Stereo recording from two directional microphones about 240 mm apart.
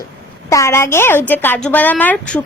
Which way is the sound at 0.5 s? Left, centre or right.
Centre.